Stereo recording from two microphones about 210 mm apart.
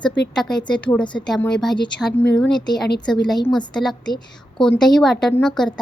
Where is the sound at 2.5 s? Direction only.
20° left (ahead or behind).